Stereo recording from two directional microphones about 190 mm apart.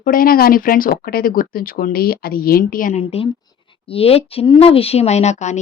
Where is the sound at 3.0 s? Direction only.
30° left (ahead or behind).